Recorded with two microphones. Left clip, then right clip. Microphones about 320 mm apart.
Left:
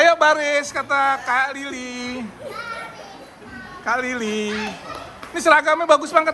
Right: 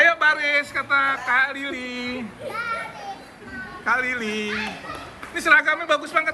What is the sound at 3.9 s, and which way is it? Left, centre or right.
A child's voice, centre.